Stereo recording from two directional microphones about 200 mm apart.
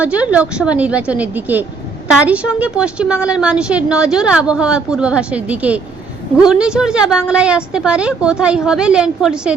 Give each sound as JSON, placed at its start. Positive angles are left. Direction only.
{"t": 0.0, "sound": "a woman's voice", "side_deg": -5}